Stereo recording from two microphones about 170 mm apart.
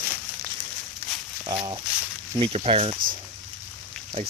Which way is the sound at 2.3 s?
35° right (ahead or behind).